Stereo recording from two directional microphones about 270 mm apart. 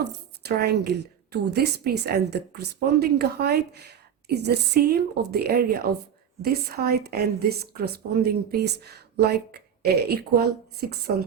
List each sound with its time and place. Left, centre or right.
0.0 s a woman's voice: right